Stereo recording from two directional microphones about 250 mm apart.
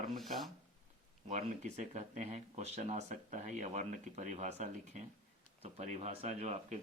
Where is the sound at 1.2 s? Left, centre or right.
Right.